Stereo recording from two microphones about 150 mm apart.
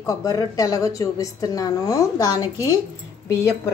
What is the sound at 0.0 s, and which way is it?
A woman's voice, 20° left (ahead or behind).